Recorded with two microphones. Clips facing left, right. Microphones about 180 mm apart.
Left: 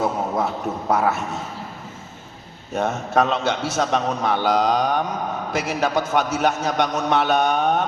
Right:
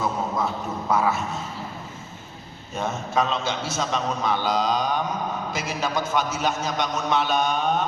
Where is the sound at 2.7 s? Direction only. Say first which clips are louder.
Left 5 dB; 70° left (ahead or behind).